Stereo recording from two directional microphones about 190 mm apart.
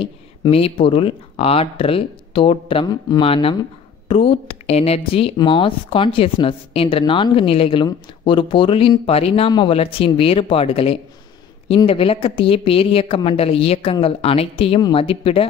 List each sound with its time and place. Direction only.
0.0 s speech: 30° left (ahead or behind)